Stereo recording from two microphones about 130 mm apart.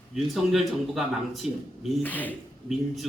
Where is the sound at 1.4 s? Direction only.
50° left (ahead or behind).